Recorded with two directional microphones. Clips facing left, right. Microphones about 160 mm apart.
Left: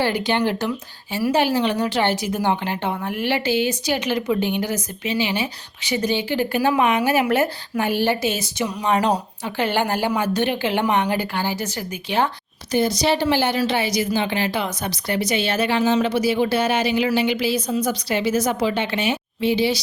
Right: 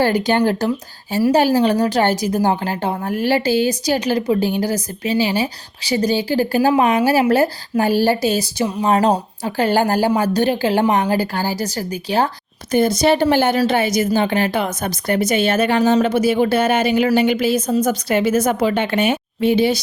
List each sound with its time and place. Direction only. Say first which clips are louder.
0.0 s a woman's voice: right 5 dB; 45° right (ahead or behind)
12.7 s speech: right 4 dB; 50° right (ahead or behind)